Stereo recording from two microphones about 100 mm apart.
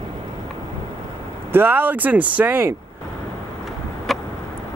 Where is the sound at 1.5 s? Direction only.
20° right (ahead or behind).